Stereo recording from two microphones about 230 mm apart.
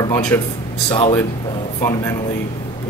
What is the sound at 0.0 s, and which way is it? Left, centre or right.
Speech, centre.